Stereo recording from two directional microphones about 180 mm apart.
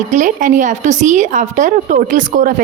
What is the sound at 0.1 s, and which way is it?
A woman's voice, 45° right (ahead or behind).